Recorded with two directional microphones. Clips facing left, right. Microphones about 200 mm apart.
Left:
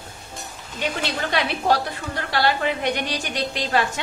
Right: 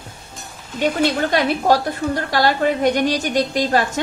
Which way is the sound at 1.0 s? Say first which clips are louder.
Right 7 dB; 45° right (ahead or behind).